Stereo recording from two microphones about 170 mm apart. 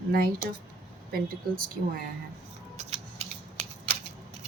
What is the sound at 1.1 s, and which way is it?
Speech, 60° right (ahead or behind).